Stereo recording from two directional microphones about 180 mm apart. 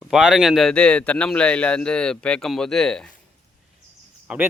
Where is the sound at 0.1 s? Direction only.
5° right (ahead or behind).